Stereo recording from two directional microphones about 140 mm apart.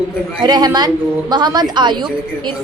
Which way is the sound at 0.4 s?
30° right (ahead or behind).